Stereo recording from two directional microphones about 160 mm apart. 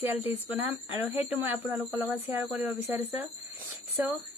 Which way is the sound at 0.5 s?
10° right (ahead or behind).